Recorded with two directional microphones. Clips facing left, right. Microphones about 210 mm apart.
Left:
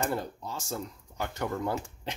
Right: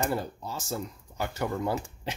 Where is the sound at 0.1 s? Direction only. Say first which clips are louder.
Right 1 dB; 5° right (ahead or behind).